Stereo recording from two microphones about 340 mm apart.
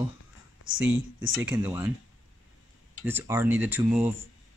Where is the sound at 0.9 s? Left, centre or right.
Right.